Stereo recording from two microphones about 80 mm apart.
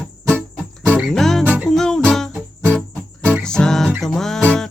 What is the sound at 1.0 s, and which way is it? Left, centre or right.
Music, centre.